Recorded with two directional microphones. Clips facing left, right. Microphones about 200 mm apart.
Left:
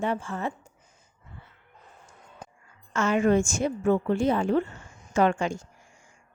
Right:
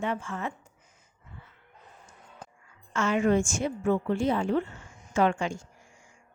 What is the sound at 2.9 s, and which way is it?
A woman's voice, 45° left (ahead or behind).